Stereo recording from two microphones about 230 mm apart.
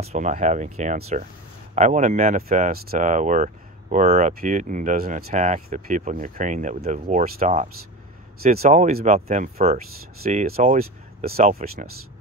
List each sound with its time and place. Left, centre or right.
0.0 s speech: right